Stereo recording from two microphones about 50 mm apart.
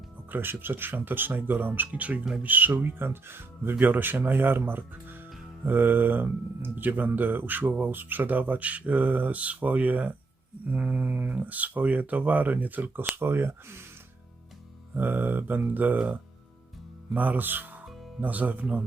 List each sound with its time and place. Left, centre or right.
0.3 s speech: right
3.8 s speech: right
13.1 s speech: right
14.9 s speech: right
17.2 s speech: right